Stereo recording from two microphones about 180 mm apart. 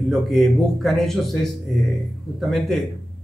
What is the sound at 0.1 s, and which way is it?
Speech, centre (ahead or behind).